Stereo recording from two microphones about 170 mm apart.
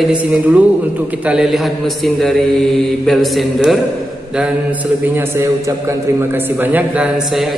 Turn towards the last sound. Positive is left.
turn(degrees=0)  # may be behind; listen again after turning